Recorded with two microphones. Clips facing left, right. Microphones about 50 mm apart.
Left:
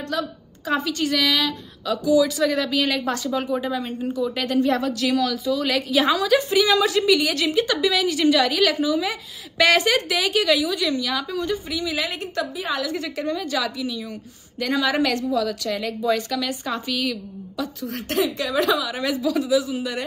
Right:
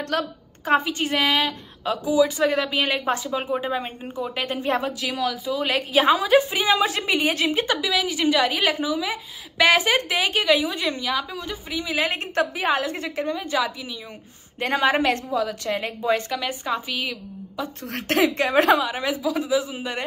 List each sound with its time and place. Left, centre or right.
0.1 s a woman's voice: right
0.9 s a woman's voice: right
5.0 s a woman's voice: centre
5.5 s a woman's voice: right
7.8 s a woman's voice: centre
8.1 s a woman's voice: centre
9.9 s a woman's voice: right
11.1 s a woman's voice: centre
11.7 s a woman's voice: right
14.6 s a woman's voice: right; by 17.6 s centre
17.8 s speech: right
18.8 s a woman's voice: right